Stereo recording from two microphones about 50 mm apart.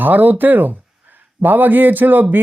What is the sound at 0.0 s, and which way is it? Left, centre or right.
Speech, right.